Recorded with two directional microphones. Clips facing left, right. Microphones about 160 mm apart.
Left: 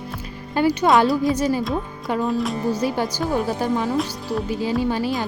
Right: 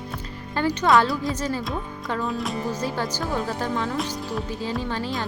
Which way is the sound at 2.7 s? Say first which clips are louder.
Left 5 dB; 10° left (ahead or behind).